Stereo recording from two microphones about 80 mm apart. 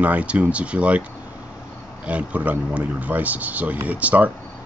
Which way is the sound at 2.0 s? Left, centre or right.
Centre.